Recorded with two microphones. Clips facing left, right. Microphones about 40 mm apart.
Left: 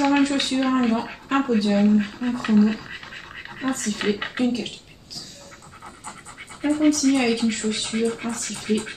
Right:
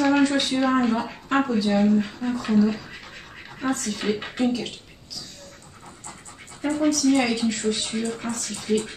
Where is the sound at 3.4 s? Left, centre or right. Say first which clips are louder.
Even; left.